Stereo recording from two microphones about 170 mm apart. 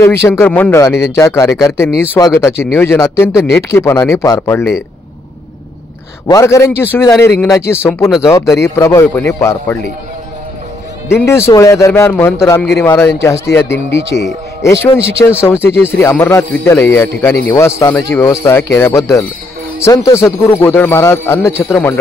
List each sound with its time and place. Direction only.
0.0 s a man's voice: 15° left (ahead or behind)
6.2 s a man's voice: 20° left (ahead or behind)
11.2 s a man's voice: 15° left (ahead or behind)